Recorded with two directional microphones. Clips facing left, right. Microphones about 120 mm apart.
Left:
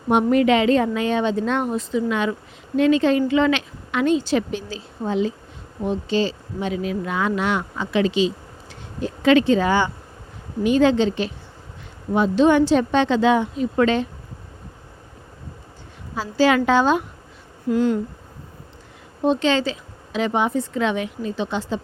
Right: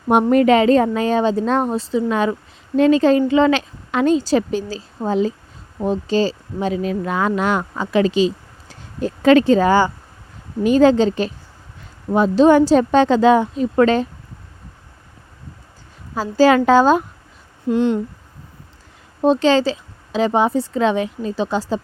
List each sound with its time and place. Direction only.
0.1 s a woman's voice: 45° right (ahead or behind)
16.1 s a woman's voice: 45° right (ahead or behind)
17.7 s speech: 25° right (ahead or behind)
19.2 s a woman's voice: 35° right (ahead or behind)